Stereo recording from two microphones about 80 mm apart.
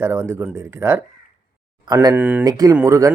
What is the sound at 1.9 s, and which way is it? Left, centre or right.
Speech, right.